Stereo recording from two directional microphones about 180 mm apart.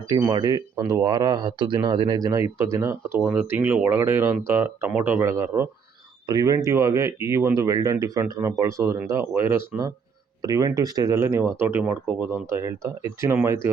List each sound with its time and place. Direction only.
0.1 s speech: 20° right (ahead or behind)